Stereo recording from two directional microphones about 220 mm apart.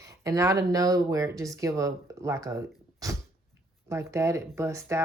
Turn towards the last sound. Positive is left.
turn(degrees=-15)  # may be behind; listen again after turning